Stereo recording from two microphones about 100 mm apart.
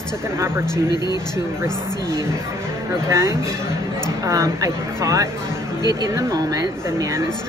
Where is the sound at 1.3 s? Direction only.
30° right (ahead or behind).